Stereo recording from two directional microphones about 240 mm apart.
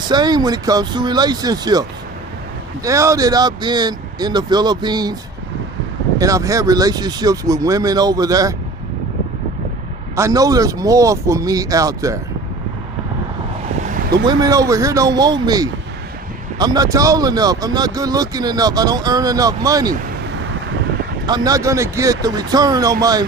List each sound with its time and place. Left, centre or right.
0.1 s speech: centre
6.1 s speech: centre
10.2 s speech: centre
13.7 s a sound: right
14.3 s speech: centre
21.2 s speech: centre